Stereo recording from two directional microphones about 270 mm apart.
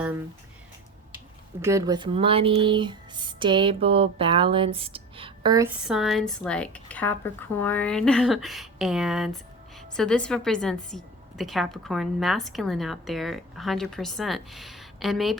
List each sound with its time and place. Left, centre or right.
1.6 s a woman's voice: centre